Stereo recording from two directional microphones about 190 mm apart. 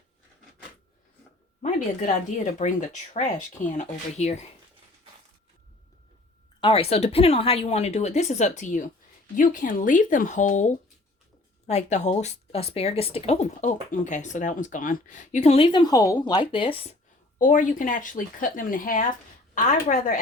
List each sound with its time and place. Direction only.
1.6 s speech: 40° left (ahead or behind)
6.6 s speech: 30° left (ahead or behind)